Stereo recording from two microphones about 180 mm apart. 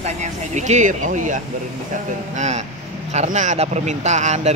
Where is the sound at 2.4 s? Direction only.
40° right (ahead or behind).